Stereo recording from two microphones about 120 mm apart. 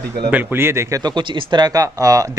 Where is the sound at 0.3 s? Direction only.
15° right (ahead or behind).